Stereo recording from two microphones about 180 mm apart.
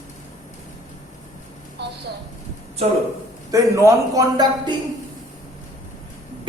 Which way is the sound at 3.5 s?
20° right (ahead or behind).